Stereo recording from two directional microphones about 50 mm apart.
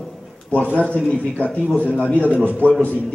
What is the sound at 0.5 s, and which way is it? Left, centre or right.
A man's voice, left.